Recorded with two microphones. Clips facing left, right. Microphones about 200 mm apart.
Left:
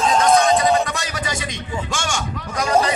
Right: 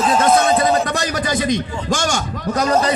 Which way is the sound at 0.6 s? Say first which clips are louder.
Right 2 dB; 35° right (ahead or behind).